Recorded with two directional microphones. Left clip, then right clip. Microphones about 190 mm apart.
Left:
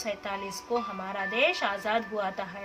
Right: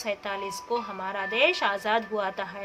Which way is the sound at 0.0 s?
55° right (ahead or behind).